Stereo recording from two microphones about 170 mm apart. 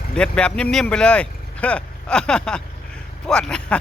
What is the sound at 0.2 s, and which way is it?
Speech, 5° left (ahead or behind).